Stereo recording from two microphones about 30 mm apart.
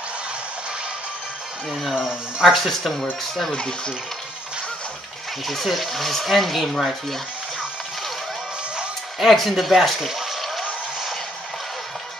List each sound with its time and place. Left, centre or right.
1.7 s speech: centre
2.0 s speech: right
2.5 s speech: centre
3.5 s speech: left
5.5 s speech: centre
9.2 s speech: centre
10.0 s a sound: centre